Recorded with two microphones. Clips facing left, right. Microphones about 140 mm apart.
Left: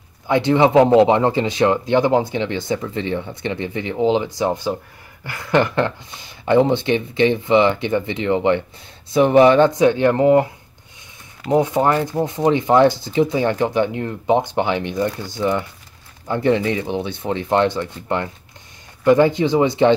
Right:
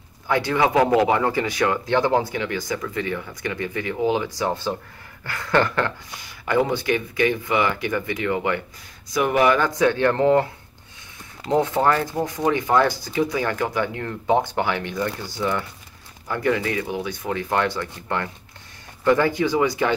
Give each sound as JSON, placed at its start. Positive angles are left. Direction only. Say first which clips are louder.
{"t": 0.3, "sound": "speech", "louder": "left 5 dB", "side_deg": 20}
{"t": 11.4, "sound": "speech", "louder": "left 3 dB", "side_deg": 15}